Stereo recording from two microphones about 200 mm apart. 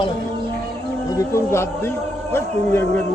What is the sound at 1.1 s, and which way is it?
Speech, 15° left (ahead or behind).